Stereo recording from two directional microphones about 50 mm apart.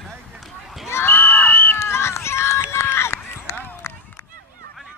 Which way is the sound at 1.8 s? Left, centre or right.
Left.